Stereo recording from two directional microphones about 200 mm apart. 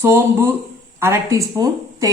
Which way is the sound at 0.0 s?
10° right (ahead or behind).